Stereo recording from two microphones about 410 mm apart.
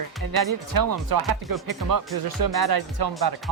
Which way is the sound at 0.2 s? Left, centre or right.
Right.